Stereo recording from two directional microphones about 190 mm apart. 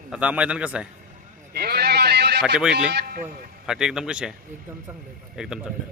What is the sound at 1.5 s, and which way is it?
Sheep, 55° right (ahead or behind).